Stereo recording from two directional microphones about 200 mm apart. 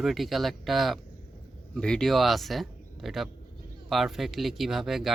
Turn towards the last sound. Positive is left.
turn(degrees=0)  # may be behind; listen again after turning